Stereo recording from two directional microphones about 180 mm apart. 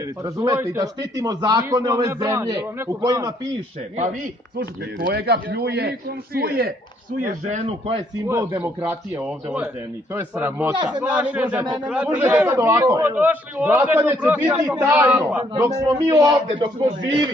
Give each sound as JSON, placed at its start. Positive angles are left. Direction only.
{"t": 0.2, "sound": "a man's voice", "side_deg": -20}
{"t": 4.6, "sound": "a man's voice", "side_deg": -60}
{"t": 7.2, "sound": "speech", "side_deg": -45}
{"t": 7.6, "sound": "a man's voice", "side_deg": -30}
{"t": 8.3, "sound": "a man's voice", "side_deg": -15}
{"t": 11.6, "sound": "a man's voice", "side_deg": -20}
{"t": 11.9, "sound": "a man's voice", "side_deg": -5}
{"t": 15.5, "sound": "a man's voice", "side_deg": -20}